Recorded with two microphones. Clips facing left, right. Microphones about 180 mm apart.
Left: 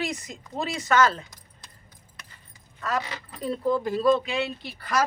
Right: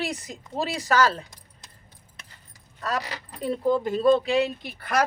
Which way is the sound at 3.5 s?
25° right (ahead or behind).